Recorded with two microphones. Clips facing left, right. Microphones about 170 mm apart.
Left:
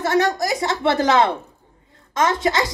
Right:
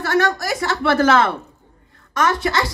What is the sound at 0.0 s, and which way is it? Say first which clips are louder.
A woman's voice: even; 20° left (ahead or behind).